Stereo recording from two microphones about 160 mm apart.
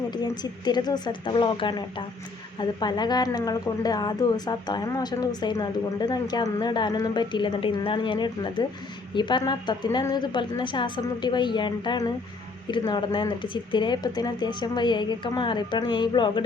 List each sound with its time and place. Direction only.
0.1 s a woman's voice: 25° left (ahead or behind)